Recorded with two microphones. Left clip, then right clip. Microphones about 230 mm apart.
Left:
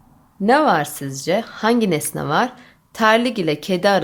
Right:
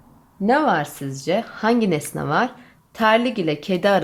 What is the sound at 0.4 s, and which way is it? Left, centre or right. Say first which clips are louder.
A woman's voice: left 3 dB; centre.